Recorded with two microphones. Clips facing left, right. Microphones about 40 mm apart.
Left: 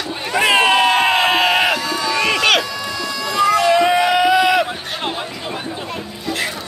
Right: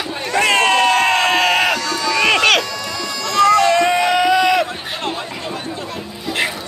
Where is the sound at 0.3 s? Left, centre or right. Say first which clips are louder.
Left 1 dB; centre.